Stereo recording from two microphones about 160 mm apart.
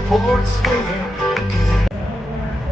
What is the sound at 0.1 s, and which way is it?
Music, centre (ahead or behind).